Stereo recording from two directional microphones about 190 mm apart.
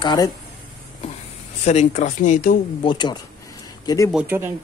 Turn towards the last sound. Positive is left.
turn(degrees=-10)  # may be behind; listen again after turning